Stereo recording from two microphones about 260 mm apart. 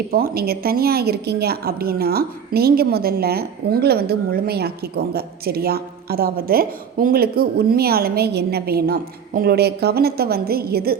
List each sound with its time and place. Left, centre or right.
0.1 s a woman's voice: right